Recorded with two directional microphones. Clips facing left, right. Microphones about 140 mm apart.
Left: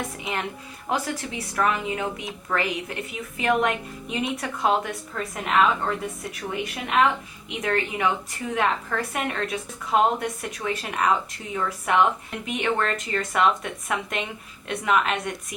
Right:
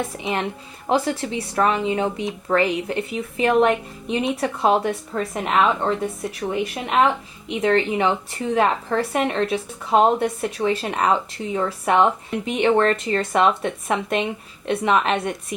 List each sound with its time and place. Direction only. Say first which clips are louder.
0.2 s a woman's voice: right 5 dB; 25° right (ahead or behind)